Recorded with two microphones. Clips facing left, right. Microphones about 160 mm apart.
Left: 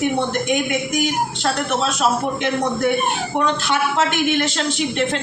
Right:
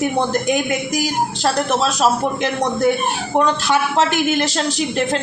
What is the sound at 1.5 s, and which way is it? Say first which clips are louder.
A woman's voice: right 4 dB; 40° right (ahead or behind).